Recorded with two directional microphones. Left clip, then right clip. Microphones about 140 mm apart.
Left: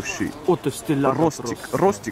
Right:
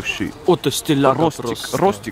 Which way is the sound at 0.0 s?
10° right (ahead or behind).